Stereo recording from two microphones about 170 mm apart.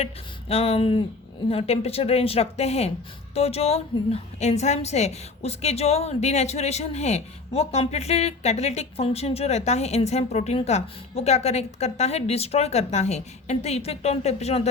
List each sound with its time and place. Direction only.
0.0 s a woman's voice: 35° left (ahead or behind)